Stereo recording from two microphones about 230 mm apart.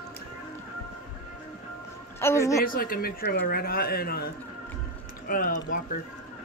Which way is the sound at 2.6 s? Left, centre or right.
Left.